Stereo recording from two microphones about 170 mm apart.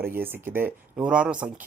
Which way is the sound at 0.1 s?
15° right (ahead or behind).